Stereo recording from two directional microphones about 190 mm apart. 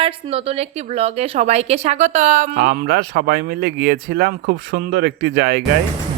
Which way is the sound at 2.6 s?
60° right (ahead or behind).